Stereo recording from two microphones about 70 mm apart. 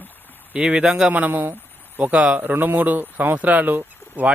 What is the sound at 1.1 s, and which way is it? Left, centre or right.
Speech, right.